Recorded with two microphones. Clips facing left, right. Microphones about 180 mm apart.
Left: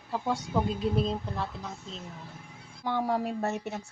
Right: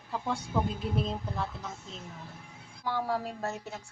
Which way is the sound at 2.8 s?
20° left (ahead or behind).